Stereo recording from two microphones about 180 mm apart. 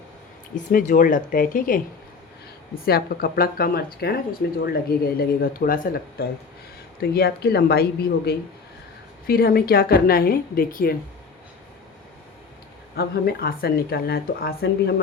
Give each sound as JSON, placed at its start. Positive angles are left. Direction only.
{"t": 0.5, "sound": "speech", "side_deg": 45}
{"t": 13.0, "sound": "speech", "side_deg": 60}